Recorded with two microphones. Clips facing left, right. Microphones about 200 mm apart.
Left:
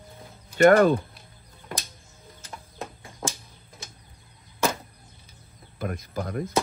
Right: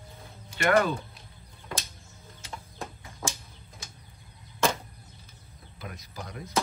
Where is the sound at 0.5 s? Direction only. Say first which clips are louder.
Left 8 dB; 50° left (ahead or behind).